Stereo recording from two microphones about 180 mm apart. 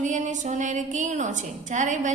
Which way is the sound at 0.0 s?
45° right (ahead or behind).